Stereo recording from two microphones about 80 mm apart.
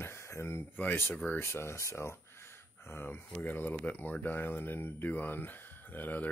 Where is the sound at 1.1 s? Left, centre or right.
Left.